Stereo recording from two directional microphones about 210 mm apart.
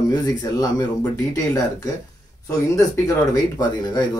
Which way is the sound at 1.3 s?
15° left (ahead or behind).